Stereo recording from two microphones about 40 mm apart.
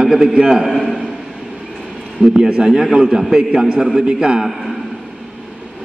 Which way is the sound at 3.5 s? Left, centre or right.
Right.